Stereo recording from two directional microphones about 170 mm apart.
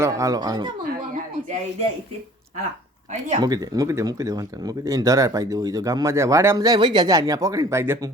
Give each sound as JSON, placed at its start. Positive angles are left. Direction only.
{"t": 0.0, "sound": "speech", "side_deg": -20}
{"t": 3.1, "sound": "speech", "side_deg": -45}
{"t": 3.4, "sound": "speech", "side_deg": -20}